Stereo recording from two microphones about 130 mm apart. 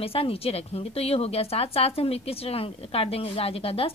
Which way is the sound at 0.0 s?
50° left (ahead or behind).